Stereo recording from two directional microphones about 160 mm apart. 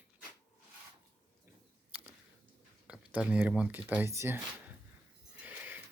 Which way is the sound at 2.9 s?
5° right (ahead or behind).